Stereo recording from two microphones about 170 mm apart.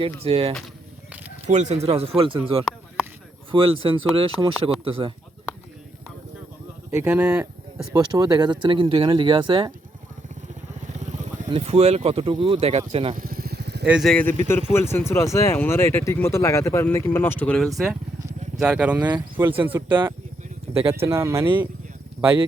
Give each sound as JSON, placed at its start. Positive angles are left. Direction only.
{"t": 0.0, "sound": "speech", "side_deg": -35}
{"t": 3.5, "sound": "speech", "side_deg": -30}
{"t": 6.9, "sound": "speech", "side_deg": -10}
{"t": 7.9, "sound": "speech", "side_deg": -20}
{"t": 11.4, "sound": "speech", "side_deg": -35}
{"t": 13.1, "sound": "motorcycle", "side_deg": -60}
{"t": 13.8, "sound": "speech", "side_deg": -5}
{"t": 18.6, "sound": "speech", "side_deg": -5}
{"t": 20.7, "sound": "a sound", "side_deg": -10}
{"t": 21.0, "sound": "speech", "side_deg": -15}